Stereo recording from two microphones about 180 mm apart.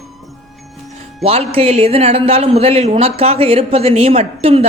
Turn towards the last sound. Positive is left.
turn(degrees=-35)  # may be behind; listen again after turning